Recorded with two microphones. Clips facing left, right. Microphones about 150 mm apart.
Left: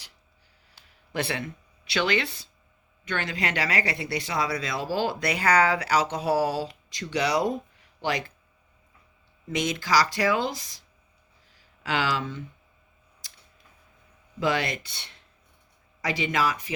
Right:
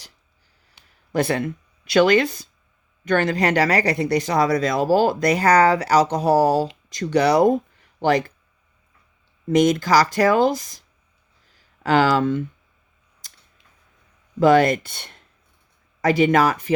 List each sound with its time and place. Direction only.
1.1 s speech: 45° right (ahead or behind)
9.5 s speech: 50° right (ahead or behind)
14.3 s speech: 50° right (ahead or behind)